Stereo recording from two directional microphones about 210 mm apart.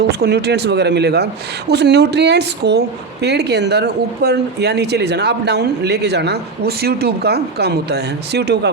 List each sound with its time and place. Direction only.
0.1 s a woman's voice: 50° right (ahead or behind)